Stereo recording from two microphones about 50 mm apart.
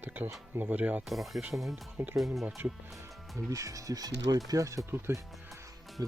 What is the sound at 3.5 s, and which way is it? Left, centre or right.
Speech, right.